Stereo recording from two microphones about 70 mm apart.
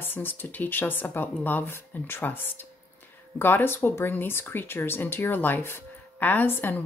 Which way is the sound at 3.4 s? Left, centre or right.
Left.